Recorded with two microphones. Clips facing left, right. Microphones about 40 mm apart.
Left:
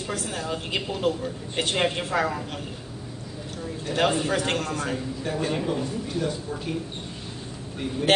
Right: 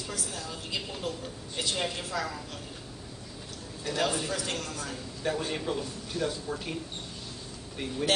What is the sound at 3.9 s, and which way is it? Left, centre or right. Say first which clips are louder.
A woman's voice: left 6 dB; left.